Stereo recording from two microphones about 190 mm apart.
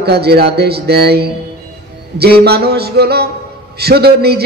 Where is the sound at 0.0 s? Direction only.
55° right (ahead or behind).